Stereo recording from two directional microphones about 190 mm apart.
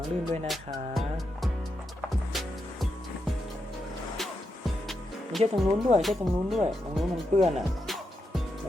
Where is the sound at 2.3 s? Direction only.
Centre (ahead or behind).